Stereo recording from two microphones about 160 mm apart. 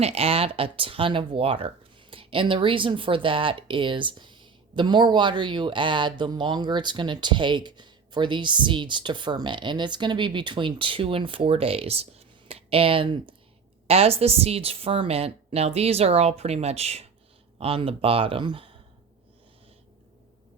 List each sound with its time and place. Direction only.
0.0 s speech: 40° right (ahead or behind)